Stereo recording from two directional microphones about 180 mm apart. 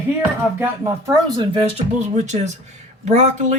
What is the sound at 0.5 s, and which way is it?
Speech, 15° right (ahead or behind).